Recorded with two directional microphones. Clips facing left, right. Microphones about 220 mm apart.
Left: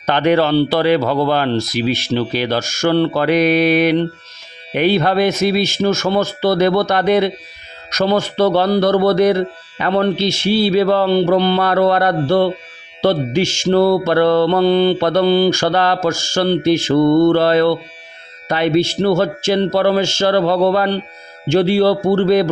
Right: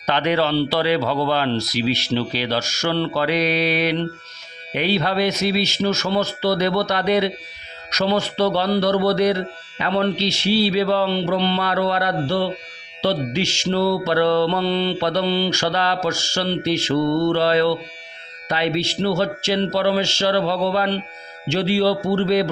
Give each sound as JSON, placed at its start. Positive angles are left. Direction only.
{"t": 0.0, "sound": "mantra", "side_deg": 50}